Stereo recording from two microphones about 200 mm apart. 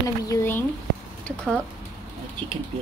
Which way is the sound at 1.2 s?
5° left (ahead or behind).